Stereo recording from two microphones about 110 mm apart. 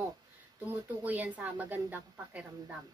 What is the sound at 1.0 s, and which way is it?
A woman's voice, 15° right (ahead or behind).